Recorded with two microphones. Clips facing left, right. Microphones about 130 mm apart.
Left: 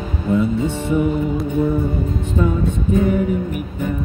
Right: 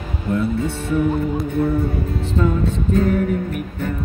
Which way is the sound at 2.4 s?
10° left (ahead or behind).